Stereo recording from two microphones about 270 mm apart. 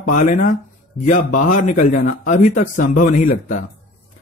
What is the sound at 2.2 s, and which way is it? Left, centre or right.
A man's voice, left.